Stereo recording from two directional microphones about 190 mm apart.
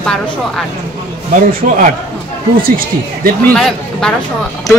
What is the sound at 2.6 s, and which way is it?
Speech, 50° right (ahead or behind).